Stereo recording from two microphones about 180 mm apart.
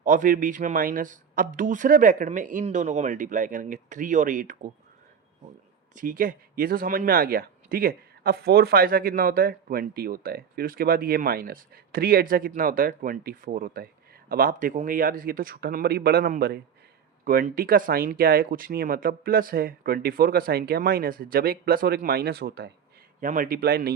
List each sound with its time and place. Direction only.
0.0 s a man's voice: 50° right (ahead or behind)
5.9 s a man's voice: 50° right (ahead or behind)
23.2 s speech: 50° right (ahead or behind)